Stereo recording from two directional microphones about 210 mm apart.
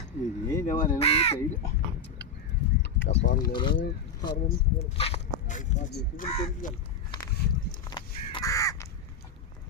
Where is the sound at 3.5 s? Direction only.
20° left (ahead or behind); by 6.8 s 40° left (ahead or behind).